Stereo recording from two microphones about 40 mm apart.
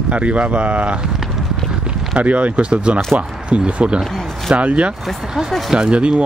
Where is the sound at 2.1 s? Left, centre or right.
Right.